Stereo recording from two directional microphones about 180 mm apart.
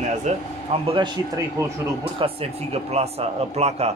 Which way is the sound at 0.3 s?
40° right (ahead or behind).